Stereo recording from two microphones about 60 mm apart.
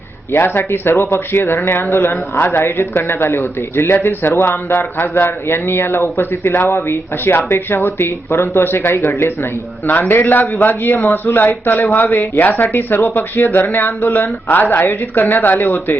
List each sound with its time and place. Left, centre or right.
0.3 s speech: left
12.1 s speech: left
12.4 s speech: left